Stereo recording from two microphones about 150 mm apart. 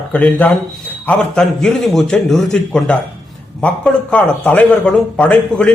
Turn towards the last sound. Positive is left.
turn(degrees=10)  # may be behind; listen again after turning